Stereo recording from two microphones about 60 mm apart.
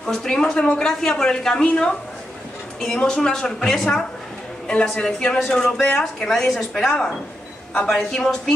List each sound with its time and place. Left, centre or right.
0.0 s speech: centre
4.6 s speech: centre
5.4 s speech: centre
8.1 s speech: centre